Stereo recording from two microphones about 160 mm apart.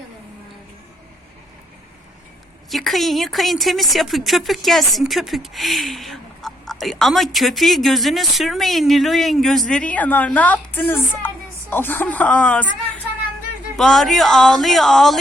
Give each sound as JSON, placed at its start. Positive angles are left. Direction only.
{"t": 2.6, "sound": "speech", "side_deg": 0}
{"t": 13.7, "sound": "speech", "side_deg": 0}